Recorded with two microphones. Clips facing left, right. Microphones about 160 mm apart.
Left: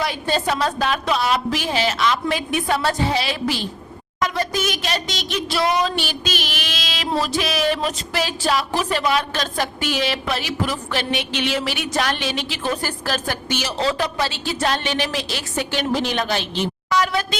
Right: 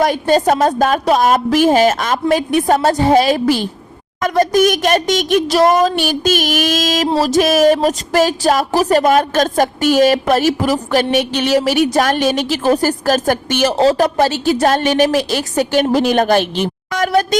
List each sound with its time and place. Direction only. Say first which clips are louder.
0.0 s speech: right 9 dB; 45° right (ahead or behind)